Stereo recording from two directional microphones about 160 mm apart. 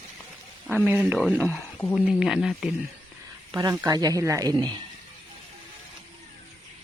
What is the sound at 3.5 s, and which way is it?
Speech, 25° right (ahead or behind).